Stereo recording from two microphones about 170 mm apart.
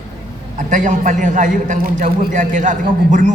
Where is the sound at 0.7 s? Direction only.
50° right (ahead or behind).